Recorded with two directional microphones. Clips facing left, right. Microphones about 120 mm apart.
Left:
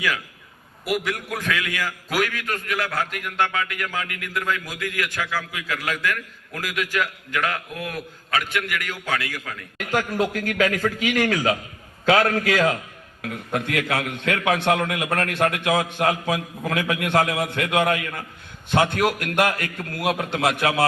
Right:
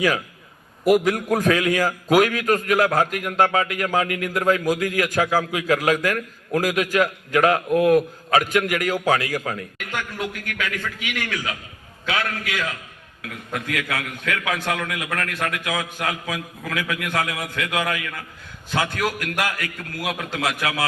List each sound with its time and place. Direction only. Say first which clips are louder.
0.9 s a man's voice: right 8 dB; 40° right (ahead or behind)
9.7 s a man's voice: left 7 dB; 35° left (ahead or behind)